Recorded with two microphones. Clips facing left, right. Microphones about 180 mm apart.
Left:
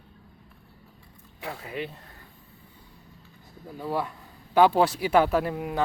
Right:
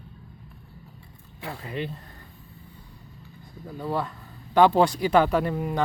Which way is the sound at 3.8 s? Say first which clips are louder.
Right 1 dB; 10° left (ahead or behind).